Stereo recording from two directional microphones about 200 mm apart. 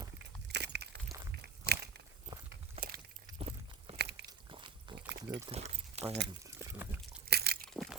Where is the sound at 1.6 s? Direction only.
55° right (ahead or behind).